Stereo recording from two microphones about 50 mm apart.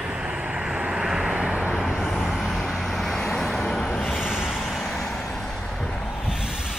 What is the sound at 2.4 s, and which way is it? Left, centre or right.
Vehicle, centre.